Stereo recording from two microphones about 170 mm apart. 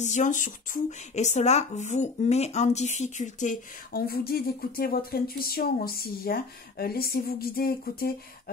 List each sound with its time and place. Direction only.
0.0 s speech: 45° left (ahead or behind)
3.9 s speech: 65° left (ahead or behind)